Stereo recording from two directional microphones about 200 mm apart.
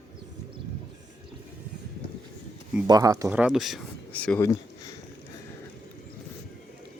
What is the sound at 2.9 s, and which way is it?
Speech, 15° right (ahead or behind).